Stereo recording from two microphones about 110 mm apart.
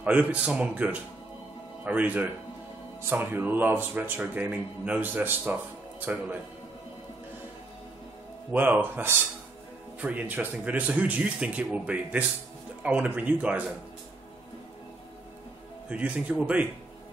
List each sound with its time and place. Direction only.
0.0 s speech: 10° right (ahead or behind)
8.5 s speech: 15° right (ahead or behind)
15.9 s speech: 10° right (ahead or behind)